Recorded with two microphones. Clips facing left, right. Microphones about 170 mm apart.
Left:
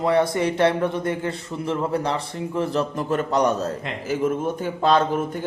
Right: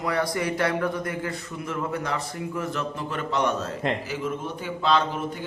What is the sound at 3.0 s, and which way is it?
A man's voice, 45° left (ahead or behind).